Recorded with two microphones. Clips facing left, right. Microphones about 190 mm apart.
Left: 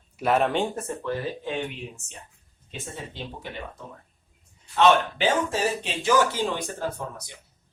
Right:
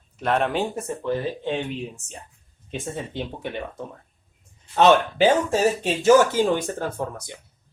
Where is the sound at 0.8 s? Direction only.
20° right (ahead or behind).